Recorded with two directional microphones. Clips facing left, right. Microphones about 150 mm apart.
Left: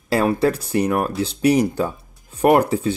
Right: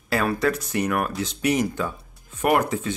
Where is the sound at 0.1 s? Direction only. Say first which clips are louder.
Left 5 dB; 30° left (ahead or behind).